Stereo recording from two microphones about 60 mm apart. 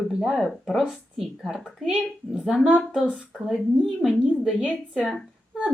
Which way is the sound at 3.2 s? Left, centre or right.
Centre.